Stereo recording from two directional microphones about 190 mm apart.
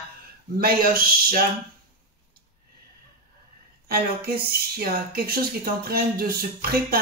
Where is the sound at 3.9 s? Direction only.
55° right (ahead or behind).